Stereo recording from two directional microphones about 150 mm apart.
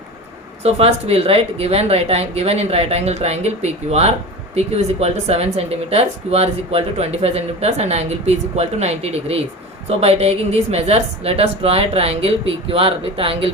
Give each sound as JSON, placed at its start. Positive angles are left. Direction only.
{"t": 0.6, "sound": "a woman's voice", "side_deg": -45}